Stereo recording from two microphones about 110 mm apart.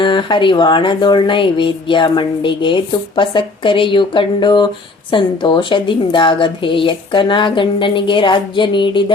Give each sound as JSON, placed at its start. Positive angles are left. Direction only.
{"t": 0.0, "sound": "speech", "side_deg": 45}